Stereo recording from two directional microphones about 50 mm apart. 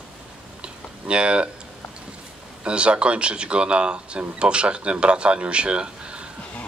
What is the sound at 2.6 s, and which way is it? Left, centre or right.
Speech, right.